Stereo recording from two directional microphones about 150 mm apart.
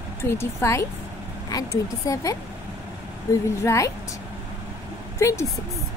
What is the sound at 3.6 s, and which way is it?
Speech, 20° left (ahead or behind).